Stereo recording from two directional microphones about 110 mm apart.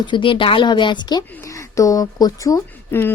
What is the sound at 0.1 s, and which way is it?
Speech, 50° left (ahead or behind).